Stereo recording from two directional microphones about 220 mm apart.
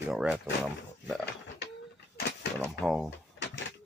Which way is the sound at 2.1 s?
45° left (ahead or behind).